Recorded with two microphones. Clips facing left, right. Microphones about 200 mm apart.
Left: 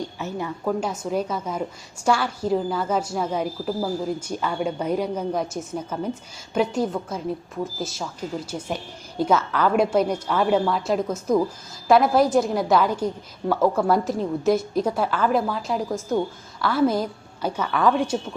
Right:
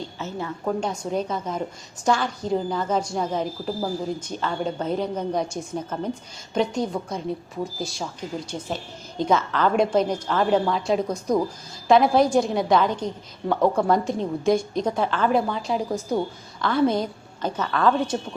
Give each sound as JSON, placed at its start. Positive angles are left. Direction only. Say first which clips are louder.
{"t": 0.2, "sound": "a woman's voice", "louder": "left 1 dB", "side_deg": 15}